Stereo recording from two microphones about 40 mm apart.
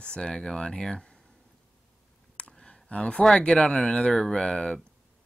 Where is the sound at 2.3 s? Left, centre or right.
Left.